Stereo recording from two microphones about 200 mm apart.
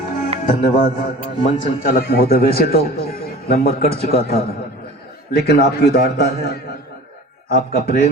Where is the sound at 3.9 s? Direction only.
30° right (ahead or behind).